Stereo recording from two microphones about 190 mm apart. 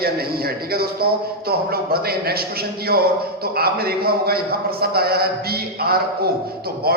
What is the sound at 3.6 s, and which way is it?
A man's voice, 55° right (ahead or behind).